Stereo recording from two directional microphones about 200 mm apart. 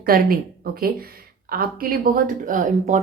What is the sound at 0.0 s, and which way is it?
Speech, 50° right (ahead or behind).